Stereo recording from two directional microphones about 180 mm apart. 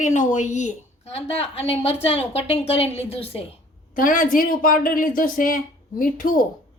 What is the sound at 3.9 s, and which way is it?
A woman's voice, 50° left (ahead or behind).